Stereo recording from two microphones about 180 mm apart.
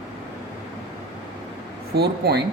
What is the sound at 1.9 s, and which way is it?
Speech, 65° right (ahead or behind).